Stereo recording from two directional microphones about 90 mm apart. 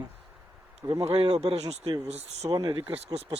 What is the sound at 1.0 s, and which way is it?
Speech, 90° right.